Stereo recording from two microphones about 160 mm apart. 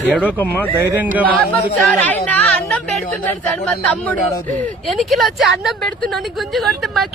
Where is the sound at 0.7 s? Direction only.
10° right (ahead or behind).